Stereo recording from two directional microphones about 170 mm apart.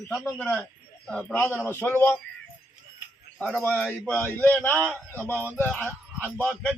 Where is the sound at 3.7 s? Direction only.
5° left (ahead or behind).